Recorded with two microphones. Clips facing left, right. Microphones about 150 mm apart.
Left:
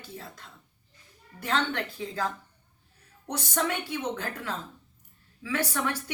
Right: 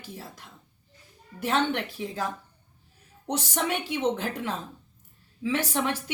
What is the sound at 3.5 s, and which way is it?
A woman's voice, 15° right (ahead or behind).